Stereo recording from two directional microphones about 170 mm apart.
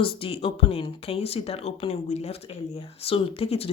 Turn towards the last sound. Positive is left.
turn(degrees=35)  # may be behind; listen again after turning